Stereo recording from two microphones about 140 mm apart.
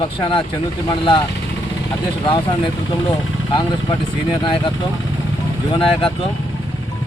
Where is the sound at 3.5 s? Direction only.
30° left (ahead or behind).